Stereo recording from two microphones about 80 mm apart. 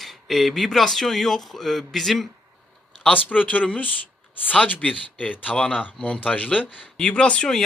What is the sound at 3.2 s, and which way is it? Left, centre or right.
Speech, centre.